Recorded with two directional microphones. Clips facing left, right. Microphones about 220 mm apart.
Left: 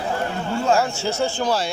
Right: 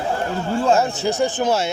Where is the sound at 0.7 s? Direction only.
20° right (ahead or behind).